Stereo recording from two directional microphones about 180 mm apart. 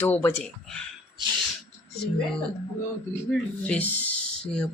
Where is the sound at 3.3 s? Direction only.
5° left (ahead or behind).